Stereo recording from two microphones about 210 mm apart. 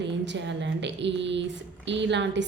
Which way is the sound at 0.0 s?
55° right (ahead or behind).